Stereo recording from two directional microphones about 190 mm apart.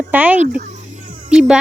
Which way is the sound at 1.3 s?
5° right (ahead or behind).